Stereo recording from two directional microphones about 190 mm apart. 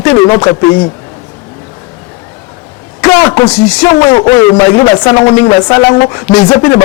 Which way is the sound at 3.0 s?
15° left (ahead or behind).